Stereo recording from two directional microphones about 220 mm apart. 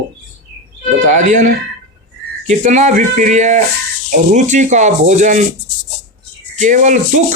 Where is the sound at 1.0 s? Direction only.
35° right (ahead or behind).